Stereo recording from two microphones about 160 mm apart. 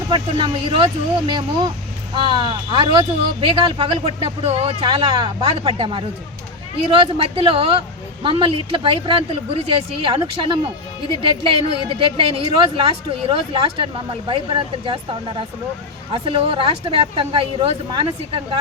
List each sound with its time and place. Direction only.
0.1 s speech: 35° right (ahead or behind)
16.1 s speech: 35° right (ahead or behind)